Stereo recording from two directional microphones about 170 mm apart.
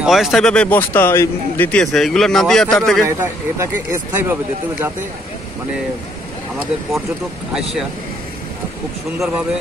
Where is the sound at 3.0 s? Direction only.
15° right (ahead or behind).